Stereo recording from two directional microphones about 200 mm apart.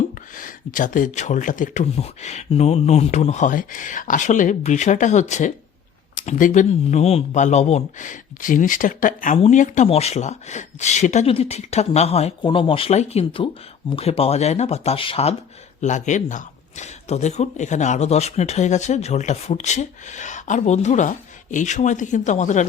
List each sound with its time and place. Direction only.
0.3 s speech: 40° left (ahead or behind)